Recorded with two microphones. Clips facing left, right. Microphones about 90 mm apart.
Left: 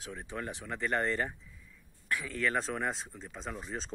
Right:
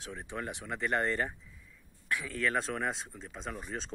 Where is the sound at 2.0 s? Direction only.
5° right (ahead or behind).